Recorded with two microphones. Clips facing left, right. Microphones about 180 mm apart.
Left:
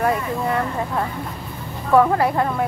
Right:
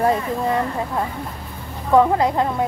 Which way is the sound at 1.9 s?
20° right (ahead or behind).